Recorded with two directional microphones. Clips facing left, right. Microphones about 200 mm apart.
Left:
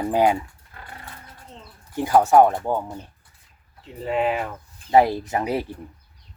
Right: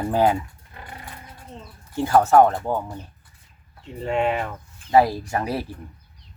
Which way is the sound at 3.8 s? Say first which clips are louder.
Even; centre (ahead or behind).